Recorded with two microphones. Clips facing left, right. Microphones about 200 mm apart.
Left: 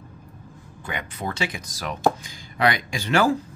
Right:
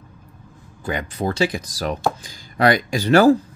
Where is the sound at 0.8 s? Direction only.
35° right (ahead or behind).